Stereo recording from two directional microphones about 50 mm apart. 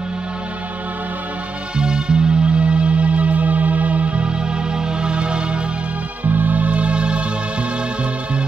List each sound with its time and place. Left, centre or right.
1.8 s music: centre
6.2 s music: right